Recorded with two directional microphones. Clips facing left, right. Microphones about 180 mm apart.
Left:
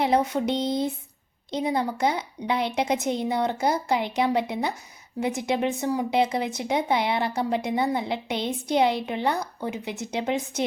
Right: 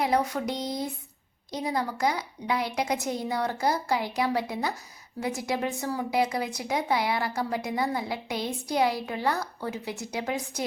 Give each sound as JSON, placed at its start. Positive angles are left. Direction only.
{"t": 0.0, "sound": "speech", "side_deg": 25}